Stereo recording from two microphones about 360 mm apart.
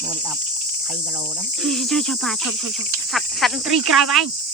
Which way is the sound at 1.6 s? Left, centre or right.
Centre.